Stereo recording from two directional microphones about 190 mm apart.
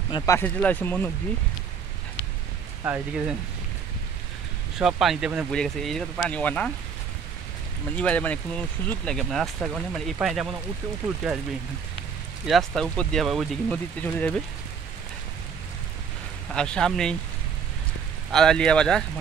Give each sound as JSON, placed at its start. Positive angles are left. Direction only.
{"t": 0.1, "sound": "speech", "side_deg": 15}
{"t": 2.8, "sound": "speech", "side_deg": -10}
{"t": 4.7, "sound": "speech", "side_deg": 0}
{"t": 7.9, "sound": "speech", "side_deg": 5}
{"t": 12.4, "sound": "speech", "side_deg": 0}
{"t": 16.5, "sound": "speech", "side_deg": 5}
{"t": 18.3, "sound": "speech", "side_deg": 5}